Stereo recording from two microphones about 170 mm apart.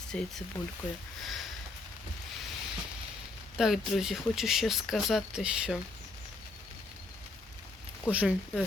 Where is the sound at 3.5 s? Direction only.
Centre (ahead or behind).